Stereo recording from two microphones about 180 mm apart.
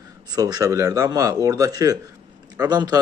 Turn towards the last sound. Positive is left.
turn(degrees=-20)  # may be behind; listen again after turning